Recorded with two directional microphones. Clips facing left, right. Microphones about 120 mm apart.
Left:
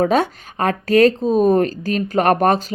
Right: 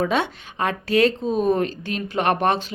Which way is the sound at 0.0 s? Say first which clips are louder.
Left 5 dB; 45° left (ahead or behind).